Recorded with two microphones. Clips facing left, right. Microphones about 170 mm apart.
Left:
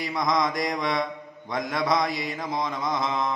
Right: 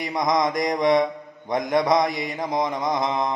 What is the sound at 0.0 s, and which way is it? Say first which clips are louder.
Mantra: right 3 dB; 20° right (ahead or behind).